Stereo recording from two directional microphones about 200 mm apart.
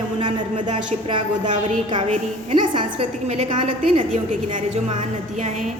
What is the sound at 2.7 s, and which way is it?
A woman's voice, 30° right (ahead or behind).